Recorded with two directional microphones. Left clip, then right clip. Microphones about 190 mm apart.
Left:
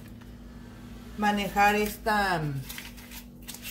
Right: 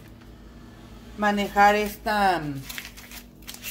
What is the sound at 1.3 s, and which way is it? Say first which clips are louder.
Speech: right 5 dB; 45° right (ahead or behind).